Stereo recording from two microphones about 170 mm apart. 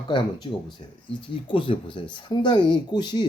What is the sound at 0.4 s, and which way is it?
Speech, 30° left (ahead or behind).